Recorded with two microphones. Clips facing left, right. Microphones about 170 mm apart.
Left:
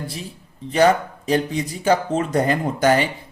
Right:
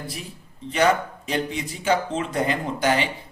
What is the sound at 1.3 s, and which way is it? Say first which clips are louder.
Speech: left 6 dB; 40° left (ahead or behind).